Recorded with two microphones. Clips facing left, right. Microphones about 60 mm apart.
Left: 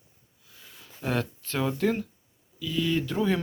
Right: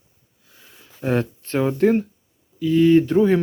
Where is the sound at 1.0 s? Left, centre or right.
Right.